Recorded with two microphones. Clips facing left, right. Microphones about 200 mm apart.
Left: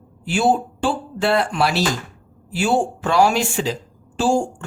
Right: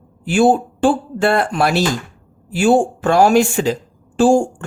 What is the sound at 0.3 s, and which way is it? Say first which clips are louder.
A woman's voice: right 5 dB; 50° right (ahead or behind).